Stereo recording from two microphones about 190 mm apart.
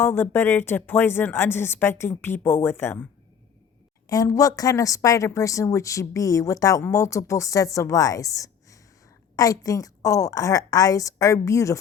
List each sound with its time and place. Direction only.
0.0 s a woman's voice: 10° left (ahead or behind)